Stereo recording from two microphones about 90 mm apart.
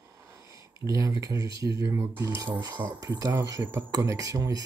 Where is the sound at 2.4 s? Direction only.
60° right (ahead or behind).